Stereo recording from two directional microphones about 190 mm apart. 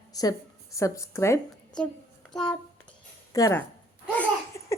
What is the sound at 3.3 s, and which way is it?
Speech, 15° left (ahead or behind).